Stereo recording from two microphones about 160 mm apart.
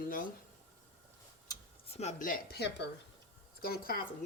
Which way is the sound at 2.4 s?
85° left.